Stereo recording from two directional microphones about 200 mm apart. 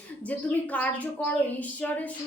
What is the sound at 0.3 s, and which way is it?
A woman's voice, 5° left (ahead or behind).